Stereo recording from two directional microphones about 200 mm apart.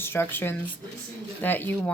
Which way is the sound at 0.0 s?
10° left (ahead or behind).